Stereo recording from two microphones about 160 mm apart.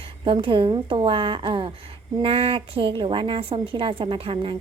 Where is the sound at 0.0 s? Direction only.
35° right (ahead or behind).